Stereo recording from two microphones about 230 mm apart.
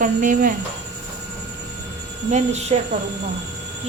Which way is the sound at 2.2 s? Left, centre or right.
Right.